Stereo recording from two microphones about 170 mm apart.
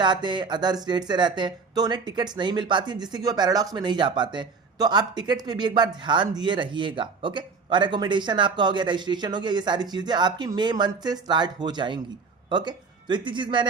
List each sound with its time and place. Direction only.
0.0 s speech: 25° right (ahead or behind)